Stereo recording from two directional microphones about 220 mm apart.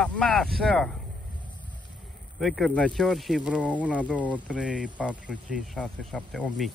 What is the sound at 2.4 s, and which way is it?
Speech, centre (ahead or behind).